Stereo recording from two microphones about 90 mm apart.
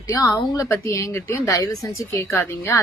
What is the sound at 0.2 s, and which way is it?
A woman's voice, 40° left (ahead or behind).